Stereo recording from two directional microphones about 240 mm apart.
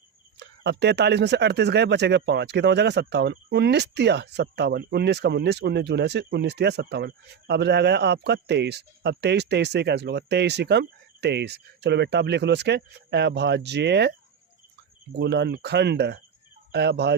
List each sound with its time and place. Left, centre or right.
0.3 s speech: right
15.2 s speech: right